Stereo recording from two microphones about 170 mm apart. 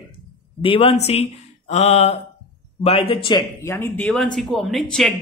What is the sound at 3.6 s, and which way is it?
Speech, 15° left (ahead or behind).